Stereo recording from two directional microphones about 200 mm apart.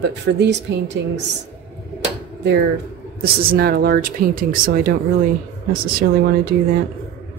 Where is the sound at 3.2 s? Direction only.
50° right (ahead or behind).